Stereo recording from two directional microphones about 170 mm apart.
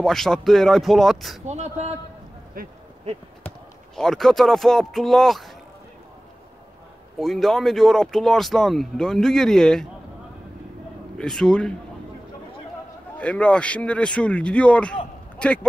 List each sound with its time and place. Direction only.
0.0 s speech: centre (ahead or behind)
1.4 s speech: 40° right (ahead or behind)
2.6 s speech: 55° right (ahead or behind)
3.4 s speech: centre (ahead or behind)
7.2 s speech: centre (ahead or behind)
11.1 s speech: 5° left (ahead or behind)
13.2 s speech: 5° left (ahead or behind)
15.3 s a sound: 5° left (ahead or behind)